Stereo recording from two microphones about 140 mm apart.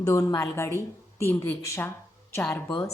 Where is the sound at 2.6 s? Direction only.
30° left (ahead or behind).